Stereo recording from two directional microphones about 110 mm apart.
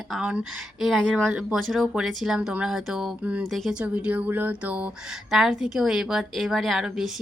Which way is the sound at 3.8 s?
10° right (ahead or behind).